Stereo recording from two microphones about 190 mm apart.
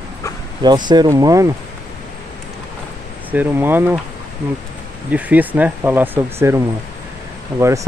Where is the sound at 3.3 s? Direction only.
10° right (ahead or behind).